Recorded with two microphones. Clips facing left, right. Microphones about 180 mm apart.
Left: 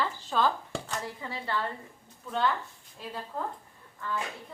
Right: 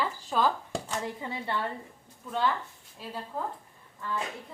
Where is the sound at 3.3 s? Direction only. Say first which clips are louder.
Right 1 dB; 10° right (ahead or behind).